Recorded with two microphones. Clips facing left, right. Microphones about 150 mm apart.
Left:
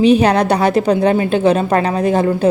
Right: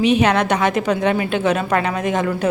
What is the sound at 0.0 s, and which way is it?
A woman's voice, 35° left (ahead or behind).